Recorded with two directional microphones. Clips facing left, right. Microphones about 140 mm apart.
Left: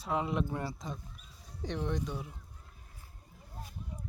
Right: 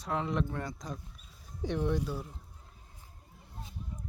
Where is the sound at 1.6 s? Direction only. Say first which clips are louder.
Right 4 dB; 10° right (ahead or behind).